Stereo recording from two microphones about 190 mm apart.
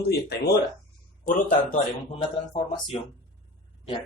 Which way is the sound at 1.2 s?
40° left (ahead or behind).